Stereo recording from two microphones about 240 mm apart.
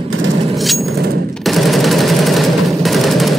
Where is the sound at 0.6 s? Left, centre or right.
Centre.